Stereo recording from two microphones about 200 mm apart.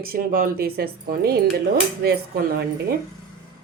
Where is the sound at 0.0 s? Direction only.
45° right (ahead or behind).